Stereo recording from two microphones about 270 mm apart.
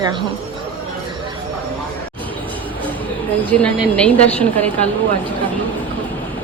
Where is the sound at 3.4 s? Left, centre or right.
Centre.